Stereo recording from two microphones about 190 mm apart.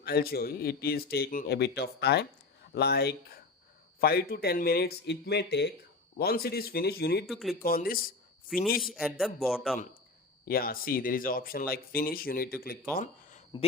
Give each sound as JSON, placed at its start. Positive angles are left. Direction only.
{"t": 0.0, "sound": "speech", "side_deg": 55}
{"t": 7.3, "sound": "speech", "side_deg": 0}
{"t": 7.6, "sound": "speech", "side_deg": 50}
{"t": 8.8, "sound": "speech", "side_deg": 0}
{"t": 10.4, "sound": "speech", "side_deg": 50}